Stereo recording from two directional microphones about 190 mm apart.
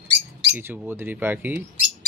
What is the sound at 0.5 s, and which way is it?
Speech, 10° right (ahead or behind).